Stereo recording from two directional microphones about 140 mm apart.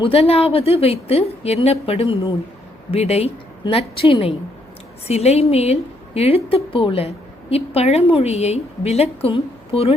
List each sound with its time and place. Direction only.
0.0 s a woman's voice: 45° left (ahead or behind)